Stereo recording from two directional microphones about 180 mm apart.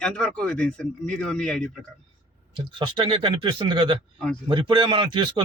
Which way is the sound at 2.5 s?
25° right (ahead or behind).